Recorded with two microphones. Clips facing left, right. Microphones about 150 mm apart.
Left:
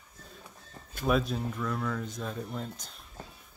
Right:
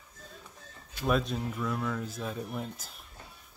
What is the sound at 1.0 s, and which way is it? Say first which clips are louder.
Speech: left 1 dB; centre (ahead or behind).